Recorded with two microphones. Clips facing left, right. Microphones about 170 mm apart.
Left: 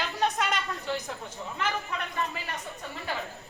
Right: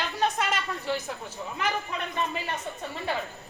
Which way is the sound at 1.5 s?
20° right (ahead or behind).